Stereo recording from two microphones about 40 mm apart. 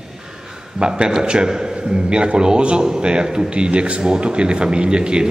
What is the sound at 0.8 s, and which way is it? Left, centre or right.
Speech, right.